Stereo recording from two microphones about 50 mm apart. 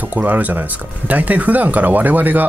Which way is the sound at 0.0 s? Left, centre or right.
Right.